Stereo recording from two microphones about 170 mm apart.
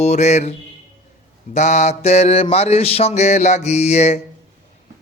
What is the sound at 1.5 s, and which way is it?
Mantra, 45° left (ahead or behind).